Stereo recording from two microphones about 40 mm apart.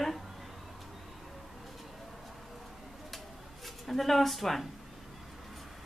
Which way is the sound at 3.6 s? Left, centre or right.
Centre.